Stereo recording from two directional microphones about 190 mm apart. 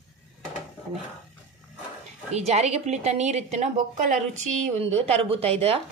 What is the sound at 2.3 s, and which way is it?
A woman's voice, 35° right (ahead or behind).